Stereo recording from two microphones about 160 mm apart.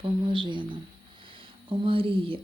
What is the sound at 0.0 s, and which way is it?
Speech, 35° right (ahead or behind).